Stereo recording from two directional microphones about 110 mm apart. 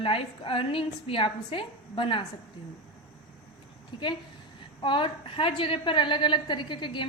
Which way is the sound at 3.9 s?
50° left (ahead or behind).